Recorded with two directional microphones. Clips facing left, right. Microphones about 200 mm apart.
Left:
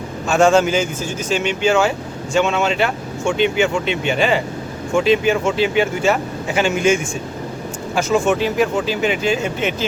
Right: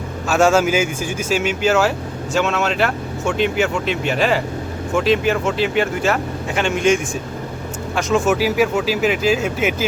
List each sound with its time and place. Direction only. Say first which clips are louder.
0.3 s speech: left 1 dB; 5° right (ahead or behind)